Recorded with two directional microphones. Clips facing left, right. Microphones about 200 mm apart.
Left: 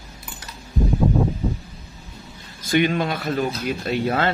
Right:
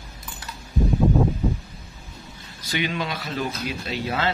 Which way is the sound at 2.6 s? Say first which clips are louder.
Left 7 dB; 50° left (ahead or behind).